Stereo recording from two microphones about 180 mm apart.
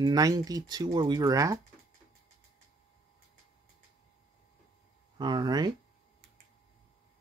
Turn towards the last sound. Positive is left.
turn(degrees=-25)  # may be behind; listen again after turning